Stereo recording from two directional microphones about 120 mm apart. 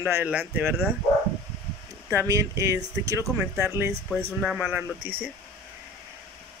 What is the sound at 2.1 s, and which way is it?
Speech, 25° right (ahead or behind).